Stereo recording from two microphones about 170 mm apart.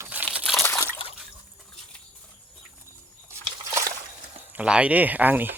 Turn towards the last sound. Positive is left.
turn(degrees=-10)  # may be behind; listen again after turning